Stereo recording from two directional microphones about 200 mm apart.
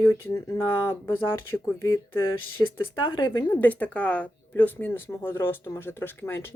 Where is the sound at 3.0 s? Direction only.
20° left (ahead or behind).